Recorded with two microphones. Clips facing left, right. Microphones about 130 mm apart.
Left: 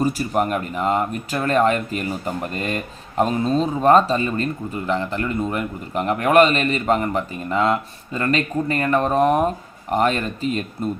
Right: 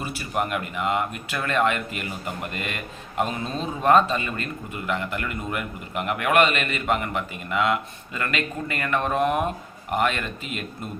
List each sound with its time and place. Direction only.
0.0 s speech: 40° left (ahead or behind)